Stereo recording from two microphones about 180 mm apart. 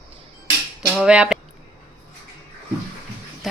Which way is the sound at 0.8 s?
5° right (ahead or behind).